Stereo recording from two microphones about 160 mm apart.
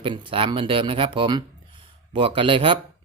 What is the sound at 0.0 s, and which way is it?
Speech, 35° right (ahead or behind).